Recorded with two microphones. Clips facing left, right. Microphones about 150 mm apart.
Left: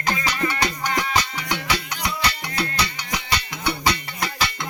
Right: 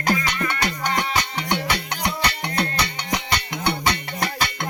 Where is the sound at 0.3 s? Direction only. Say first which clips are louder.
Left 1 dB; 55° right (ahead or behind).